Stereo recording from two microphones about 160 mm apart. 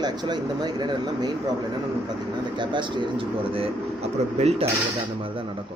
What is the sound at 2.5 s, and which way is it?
Speech, 30° right (ahead or behind).